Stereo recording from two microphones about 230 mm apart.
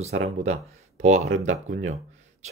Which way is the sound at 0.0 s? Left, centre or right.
Right.